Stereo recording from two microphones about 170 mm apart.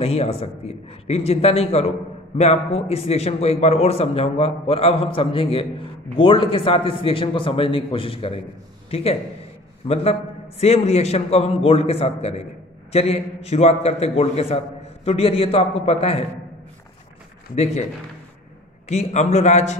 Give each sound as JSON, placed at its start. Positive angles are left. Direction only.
{"t": 0.0, "sound": "a man's voice", "side_deg": 35}
{"t": 18.9, "sound": "a man's voice", "side_deg": 40}